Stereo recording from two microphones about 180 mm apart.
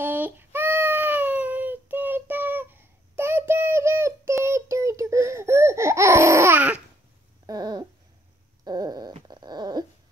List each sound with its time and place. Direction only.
0.0 s child singing: 10° right (ahead or behind)
7.4 s a sound: 20° right (ahead or behind)
9.1 s dog: 25° right (ahead or behind)